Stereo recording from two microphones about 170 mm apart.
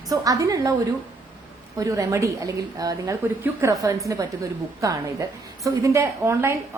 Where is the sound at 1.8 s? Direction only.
20° right (ahead or behind).